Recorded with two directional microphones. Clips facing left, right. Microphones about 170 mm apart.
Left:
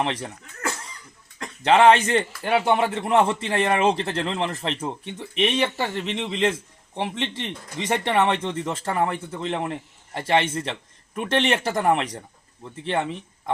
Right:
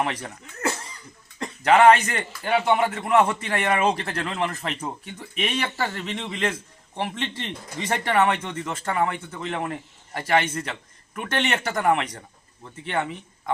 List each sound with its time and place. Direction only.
0.0 s a man's voice: 25° left (ahead or behind)
1.6 s a man's voice: 30° left (ahead or behind)